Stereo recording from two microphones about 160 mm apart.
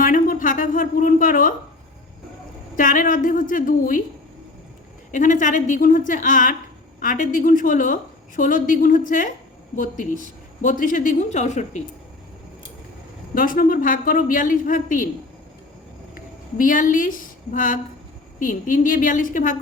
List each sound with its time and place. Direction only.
0.0 s a sound: 55° left (ahead or behind)
2.7 s a woman's voice: 55° left (ahead or behind)
5.1 s a woman's voice: 50° left (ahead or behind)
13.3 s a woman's voice: 60° left (ahead or behind)
16.1 s a woman's voice: 60° left (ahead or behind)